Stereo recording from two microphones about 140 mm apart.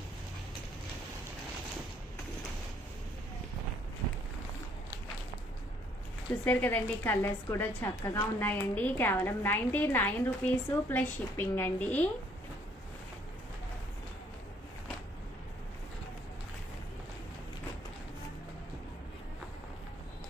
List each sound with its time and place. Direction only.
6.4 s a woman's voice: 10° left (ahead or behind)